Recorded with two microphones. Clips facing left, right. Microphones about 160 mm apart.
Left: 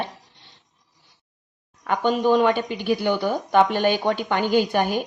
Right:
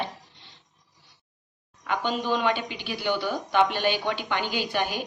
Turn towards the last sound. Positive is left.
turn(degrees=50)  # may be behind; listen again after turning